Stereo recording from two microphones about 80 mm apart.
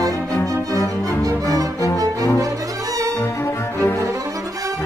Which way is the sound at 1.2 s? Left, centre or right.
Right.